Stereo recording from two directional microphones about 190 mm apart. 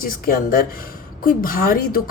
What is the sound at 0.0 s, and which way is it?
A woman's voice, 50° left (ahead or behind).